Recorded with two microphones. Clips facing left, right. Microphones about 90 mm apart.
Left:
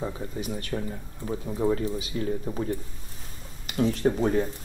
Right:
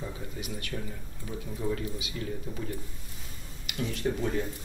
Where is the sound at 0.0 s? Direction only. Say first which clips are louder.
Left 6 dB; 35° left (ahead or behind).